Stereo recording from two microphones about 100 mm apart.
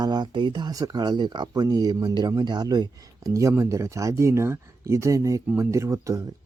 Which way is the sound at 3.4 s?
30° right (ahead or behind).